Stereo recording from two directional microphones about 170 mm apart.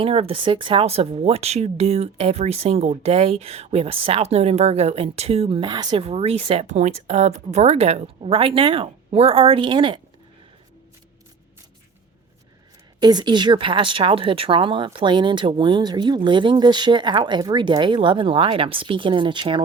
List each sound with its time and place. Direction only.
0.0 s speech: 35° right (ahead or behind)
13.0 s speech: 25° right (ahead or behind)